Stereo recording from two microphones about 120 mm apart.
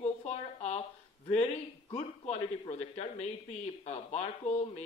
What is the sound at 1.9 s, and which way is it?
A man's voice, 65° left (ahead or behind).